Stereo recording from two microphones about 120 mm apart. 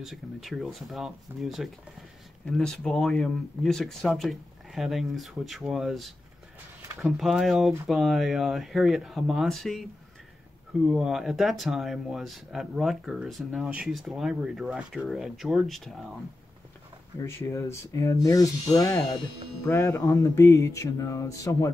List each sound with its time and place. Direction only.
0.0 s speech: centre (ahead or behind)
10.9 s speech: 5° right (ahead or behind)
17.2 s music: 20° left (ahead or behind)